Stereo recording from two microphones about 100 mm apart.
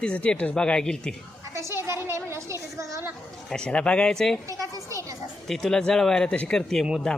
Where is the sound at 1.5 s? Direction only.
25° right (ahead or behind).